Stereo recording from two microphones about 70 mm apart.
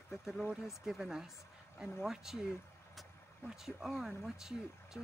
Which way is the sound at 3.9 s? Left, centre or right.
Centre.